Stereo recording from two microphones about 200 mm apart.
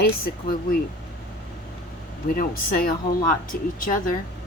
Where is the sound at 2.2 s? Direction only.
45° left (ahead or behind).